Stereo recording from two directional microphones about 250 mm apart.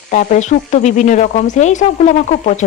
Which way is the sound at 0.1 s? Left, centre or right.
Left.